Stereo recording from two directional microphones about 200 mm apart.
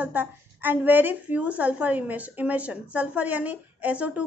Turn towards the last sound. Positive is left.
turn(degrees=-5)  # may be behind; listen again after turning